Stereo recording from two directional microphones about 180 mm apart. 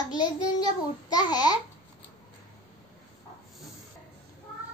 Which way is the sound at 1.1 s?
20° left (ahead or behind).